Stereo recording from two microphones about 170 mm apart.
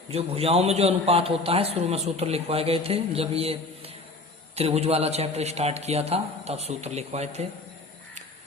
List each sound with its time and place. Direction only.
0.1 s a man's voice: 35° right (ahead or behind)